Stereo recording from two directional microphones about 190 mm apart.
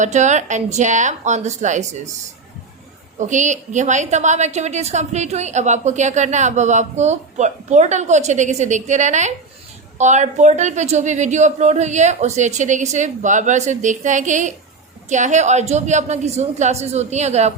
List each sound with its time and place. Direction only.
0.0 s a woman's voice: 40° right (ahead or behind)
3.2 s a woman's voice: 40° right (ahead or behind)